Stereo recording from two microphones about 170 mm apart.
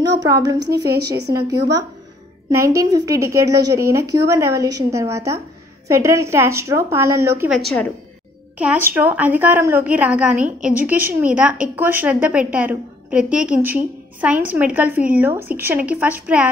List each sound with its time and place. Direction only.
0.0 s a woman's voice: 20° right (ahead or behind)
7.5 s speech: centre (ahead or behind)
8.5 s a woman's voice: 10° right (ahead or behind)